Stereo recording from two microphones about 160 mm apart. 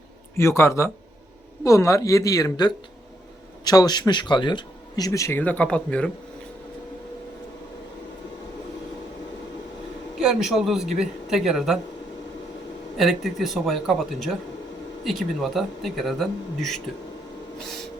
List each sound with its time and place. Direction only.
0.3 s speech: 15° left (ahead or behind)
10.2 s speech: 5° right (ahead or behind)
13.0 s speech: centre (ahead or behind)